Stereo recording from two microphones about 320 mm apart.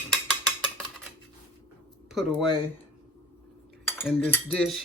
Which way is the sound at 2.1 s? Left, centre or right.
Centre.